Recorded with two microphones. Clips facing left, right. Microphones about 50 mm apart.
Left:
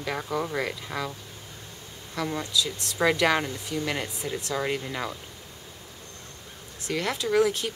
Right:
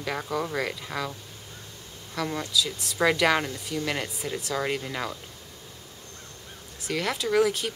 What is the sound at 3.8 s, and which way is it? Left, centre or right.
Speech, centre.